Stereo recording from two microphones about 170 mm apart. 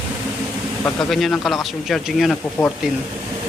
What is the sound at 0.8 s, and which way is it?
Speech, centre (ahead or behind).